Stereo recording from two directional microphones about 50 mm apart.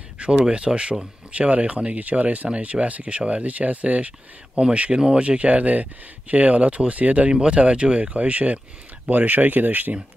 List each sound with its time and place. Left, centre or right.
0.2 s speech: centre; by 9.9 s right